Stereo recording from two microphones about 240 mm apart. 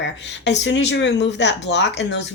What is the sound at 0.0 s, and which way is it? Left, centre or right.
A woman's voice, left.